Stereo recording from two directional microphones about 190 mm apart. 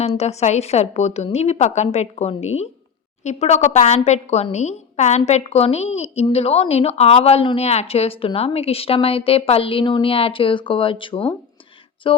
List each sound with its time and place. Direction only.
0.0 s a woman's voice: 35° left (ahead or behind)